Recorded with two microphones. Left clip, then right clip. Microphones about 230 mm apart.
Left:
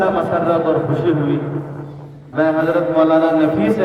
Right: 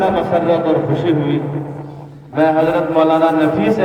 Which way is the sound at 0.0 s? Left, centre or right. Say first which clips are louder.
Right 1 dB; right.